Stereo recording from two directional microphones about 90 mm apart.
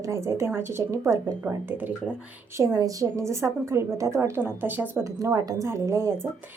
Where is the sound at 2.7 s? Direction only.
35° right (ahead or behind).